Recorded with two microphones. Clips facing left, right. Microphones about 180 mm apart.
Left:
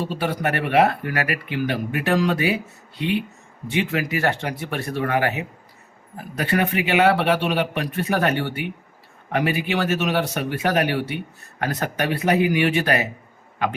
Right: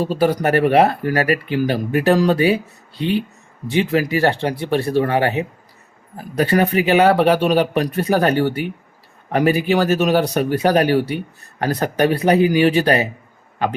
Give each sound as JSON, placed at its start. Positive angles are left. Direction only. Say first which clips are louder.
{"t": 0.0, "sound": "speech", "louder": "right 7 dB", "side_deg": -40}